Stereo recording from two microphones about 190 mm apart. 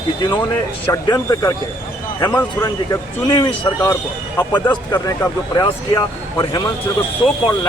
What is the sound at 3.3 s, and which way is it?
Speech, 20° left (ahead or behind).